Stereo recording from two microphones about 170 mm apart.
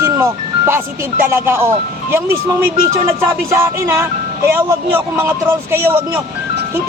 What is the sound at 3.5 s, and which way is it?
Speech, 15° right (ahead or behind).